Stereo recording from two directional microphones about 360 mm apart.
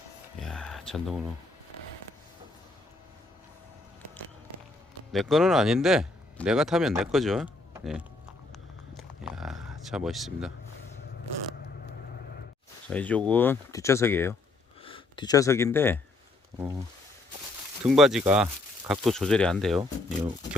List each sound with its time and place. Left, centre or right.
0.3 s a sound: centre
5.1 s speech: centre
9.0 s a sound: centre
12.9 s speech: centre
16.6 s speech: centre
17.8 s speech: centre